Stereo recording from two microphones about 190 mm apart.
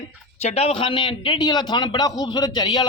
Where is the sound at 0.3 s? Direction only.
35° left (ahead or behind).